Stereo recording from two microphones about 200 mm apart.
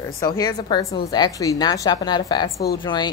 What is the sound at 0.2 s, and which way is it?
A woman's voice, 20° left (ahead or behind).